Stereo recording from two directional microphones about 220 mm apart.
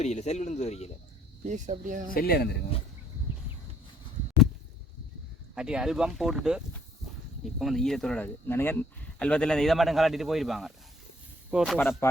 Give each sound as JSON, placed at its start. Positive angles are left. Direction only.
{"t": 0.0, "sound": "speech", "side_deg": 30}
{"t": 1.5, "sound": "speech", "side_deg": -35}
{"t": 2.1, "sound": "speech", "side_deg": 45}
{"t": 5.5, "sound": "speech", "side_deg": -5}